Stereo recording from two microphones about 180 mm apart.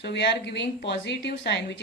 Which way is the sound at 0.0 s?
70° left (ahead or behind).